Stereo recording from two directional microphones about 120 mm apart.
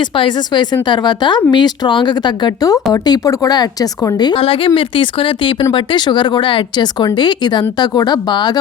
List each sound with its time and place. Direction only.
0.0 s speech: 45° left (ahead or behind)
4.4 s speech: 50° left (ahead or behind)